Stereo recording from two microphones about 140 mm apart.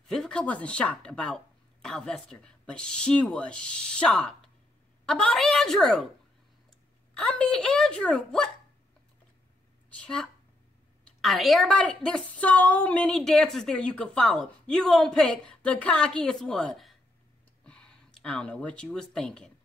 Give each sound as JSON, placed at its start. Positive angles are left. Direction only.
{"t": 0.1, "sound": "a woman's voice", "side_deg": 5}
{"t": 7.2, "sound": "a woman's voice", "side_deg": 5}
{"t": 9.9, "sound": "a woman's voice", "side_deg": 5}